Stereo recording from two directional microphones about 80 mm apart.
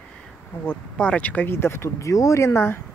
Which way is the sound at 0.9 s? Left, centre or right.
Centre.